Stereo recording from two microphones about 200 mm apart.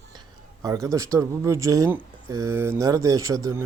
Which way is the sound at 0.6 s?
15° right (ahead or behind).